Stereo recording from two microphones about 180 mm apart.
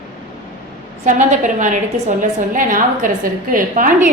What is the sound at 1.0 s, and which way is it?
A woman's voice, 45° right (ahead or behind).